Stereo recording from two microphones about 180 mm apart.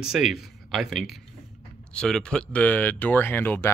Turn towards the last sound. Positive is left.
turn(degrees=10)  # may be behind; listen again after turning